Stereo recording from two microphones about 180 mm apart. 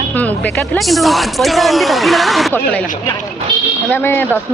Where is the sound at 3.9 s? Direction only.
10° left (ahead or behind).